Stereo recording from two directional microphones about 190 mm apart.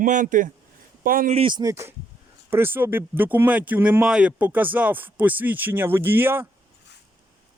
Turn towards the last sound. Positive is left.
turn(degrees=-10)  # may be behind; listen again after turning